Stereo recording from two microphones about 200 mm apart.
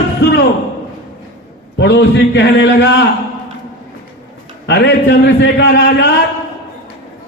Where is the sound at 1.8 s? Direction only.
65° left (ahead or behind).